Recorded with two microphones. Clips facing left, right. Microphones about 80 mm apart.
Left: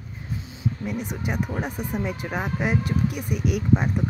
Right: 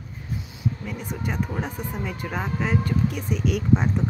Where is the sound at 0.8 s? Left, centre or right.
Centre.